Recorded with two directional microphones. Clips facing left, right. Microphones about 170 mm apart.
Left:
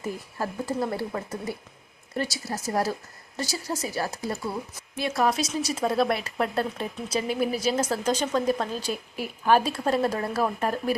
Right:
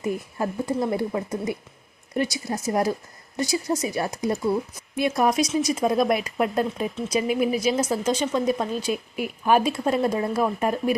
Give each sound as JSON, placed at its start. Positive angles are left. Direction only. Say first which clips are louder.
{"t": 0.0, "sound": "speech", "louder": "right 5 dB", "side_deg": -20}